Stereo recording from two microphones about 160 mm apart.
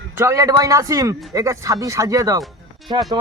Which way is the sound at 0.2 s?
20° right (ahead or behind).